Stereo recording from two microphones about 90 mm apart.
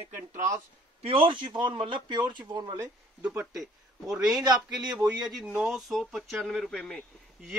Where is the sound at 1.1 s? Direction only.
75° right (ahead or behind); by 2.9 s 50° right (ahead or behind).